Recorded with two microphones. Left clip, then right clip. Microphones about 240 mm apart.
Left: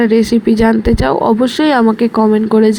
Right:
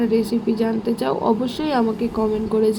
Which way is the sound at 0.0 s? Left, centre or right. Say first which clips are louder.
Left 9 dB; left.